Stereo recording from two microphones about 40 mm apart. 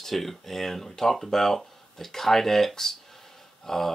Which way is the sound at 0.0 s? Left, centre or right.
Centre.